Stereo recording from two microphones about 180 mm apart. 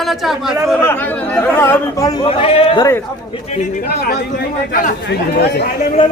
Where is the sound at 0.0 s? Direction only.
Centre (ahead or behind).